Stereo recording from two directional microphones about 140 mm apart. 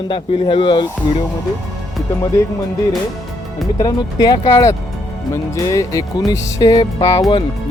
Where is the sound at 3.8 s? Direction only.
30° left (ahead or behind).